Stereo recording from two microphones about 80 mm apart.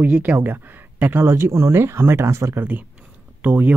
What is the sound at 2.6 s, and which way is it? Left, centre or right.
Speech, right.